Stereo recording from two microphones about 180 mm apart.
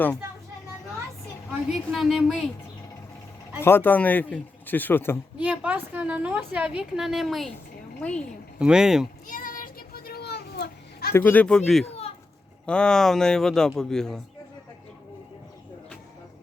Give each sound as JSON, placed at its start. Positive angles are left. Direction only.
{"t": 1.7, "sound": "a man's voice", "side_deg": 0}
{"t": 3.6, "sound": "a man's voice", "side_deg": 10}
{"t": 5.4, "sound": "a woman's voice", "side_deg": -10}
{"t": 8.5, "sound": "a man's voice", "side_deg": -5}
{"t": 9.2, "sound": "children playing", "side_deg": 50}
{"t": 11.1, "sound": "a man's voice", "side_deg": 10}